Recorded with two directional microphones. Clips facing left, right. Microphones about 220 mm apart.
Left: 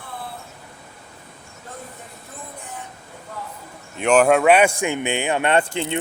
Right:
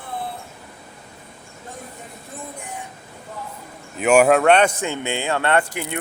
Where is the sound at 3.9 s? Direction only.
5° right (ahead or behind).